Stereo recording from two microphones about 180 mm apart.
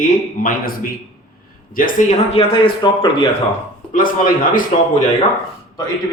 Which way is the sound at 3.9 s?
50° left (ahead or behind).